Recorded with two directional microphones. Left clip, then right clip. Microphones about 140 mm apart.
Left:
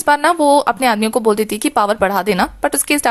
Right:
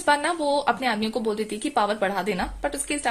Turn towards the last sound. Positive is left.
turn(degrees=40)  # may be behind; listen again after turning